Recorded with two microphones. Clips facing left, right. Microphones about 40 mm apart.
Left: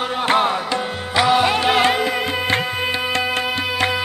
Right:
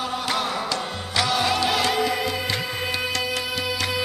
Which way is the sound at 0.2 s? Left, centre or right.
Left.